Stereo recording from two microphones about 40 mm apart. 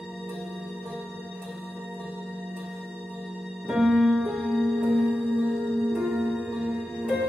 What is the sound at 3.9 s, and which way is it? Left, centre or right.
Keyboard, centre.